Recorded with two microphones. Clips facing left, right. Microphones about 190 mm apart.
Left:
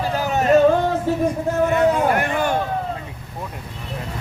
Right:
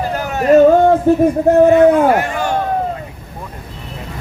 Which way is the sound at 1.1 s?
50° right (ahead or behind).